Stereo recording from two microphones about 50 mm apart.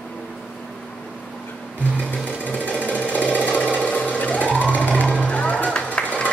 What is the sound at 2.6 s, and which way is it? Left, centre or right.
Sewing machine, left.